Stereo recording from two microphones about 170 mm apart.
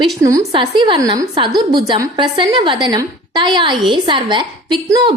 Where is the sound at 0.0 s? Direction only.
20° right (ahead or behind).